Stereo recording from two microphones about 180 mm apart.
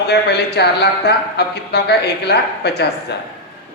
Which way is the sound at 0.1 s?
65° left (ahead or behind).